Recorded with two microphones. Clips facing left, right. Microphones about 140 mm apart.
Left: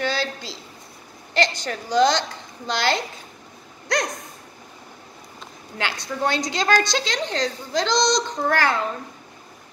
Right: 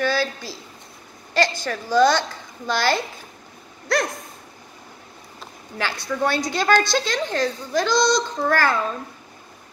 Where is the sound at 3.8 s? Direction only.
20° left (ahead or behind).